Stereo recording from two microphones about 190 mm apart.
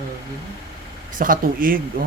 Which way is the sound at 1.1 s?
45° right (ahead or behind).